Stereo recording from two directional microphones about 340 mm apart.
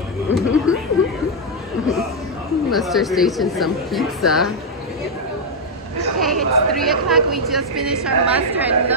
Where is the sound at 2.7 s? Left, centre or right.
Centre.